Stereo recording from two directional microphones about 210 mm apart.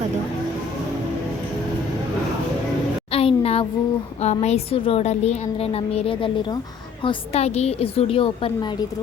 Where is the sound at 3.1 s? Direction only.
25° left (ahead or behind).